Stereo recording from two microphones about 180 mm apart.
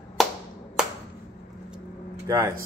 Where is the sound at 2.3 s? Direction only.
15° right (ahead or behind).